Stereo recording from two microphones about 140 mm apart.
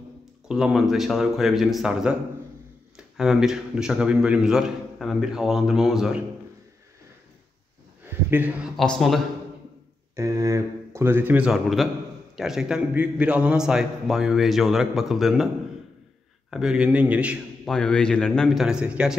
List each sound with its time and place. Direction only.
0.5 s a man's voice: 5° right (ahead or behind)
8.0 s a sound: 15° right (ahead or behind)
8.7 s a man's voice: 5° left (ahead or behind)
10.1 s a man's voice: 20° right (ahead or behind)
17.6 s a man's voice: 5° left (ahead or behind)